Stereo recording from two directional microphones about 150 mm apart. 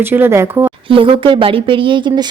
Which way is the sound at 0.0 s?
15° right (ahead or behind).